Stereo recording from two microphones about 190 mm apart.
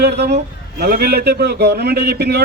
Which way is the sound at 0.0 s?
60° right (ahead or behind).